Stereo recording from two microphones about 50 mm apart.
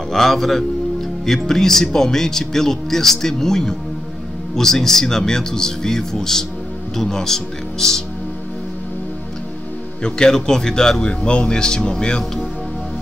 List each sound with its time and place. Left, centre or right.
0.1 s a man's voice: centre
10.0 s speech: centre